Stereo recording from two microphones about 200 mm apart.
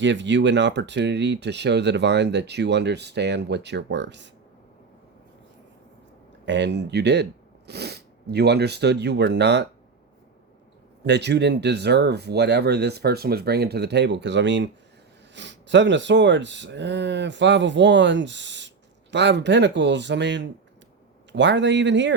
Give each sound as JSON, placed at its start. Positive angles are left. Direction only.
{"t": 0.0, "sound": "speech", "side_deg": -65}
{"t": 6.4, "sound": "speech", "side_deg": -60}
{"t": 11.0, "sound": "speech", "side_deg": -60}